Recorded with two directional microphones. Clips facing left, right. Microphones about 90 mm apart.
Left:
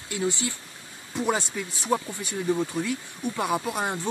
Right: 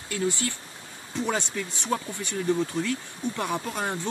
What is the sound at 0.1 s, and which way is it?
Speech, 20° left (ahead or behind).